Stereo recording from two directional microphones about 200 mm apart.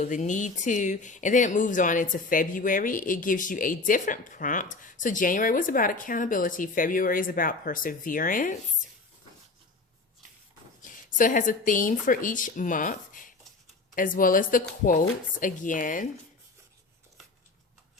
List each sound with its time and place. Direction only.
0.0 s speech: 35° left (ahead or behind)
10.8 s speech: 40° left (ahead or behind)